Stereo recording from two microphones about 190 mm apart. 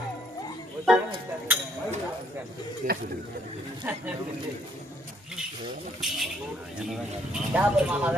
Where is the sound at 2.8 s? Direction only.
45° right (ahead or behind).